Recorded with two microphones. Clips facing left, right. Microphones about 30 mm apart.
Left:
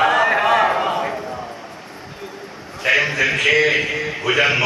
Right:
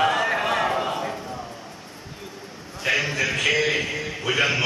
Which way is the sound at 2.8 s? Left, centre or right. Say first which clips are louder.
Left 6 dB; left.